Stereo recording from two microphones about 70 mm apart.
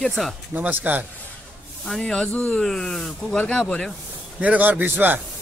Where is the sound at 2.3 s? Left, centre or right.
Left.